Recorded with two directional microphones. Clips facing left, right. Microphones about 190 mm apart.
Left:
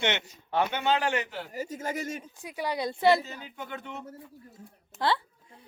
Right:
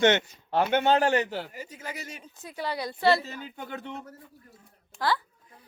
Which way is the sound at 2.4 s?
15° left (ahead or behind).